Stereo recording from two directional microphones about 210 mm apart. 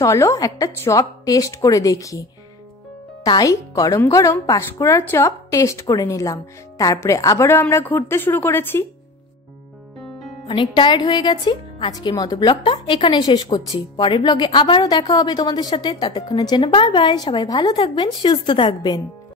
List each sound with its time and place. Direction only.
0.0 s speech: 15° left (ahead or behind)
3.3 s speech: 15° left (ahead or behind)
10.4 s speech: 20° left (ahead or behind)